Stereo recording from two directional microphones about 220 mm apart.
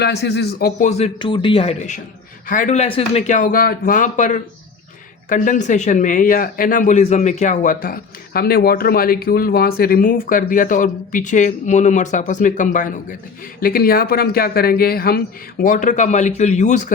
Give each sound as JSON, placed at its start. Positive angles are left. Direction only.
{"t": 0.0, "sound": "speech", "side_deg": 50}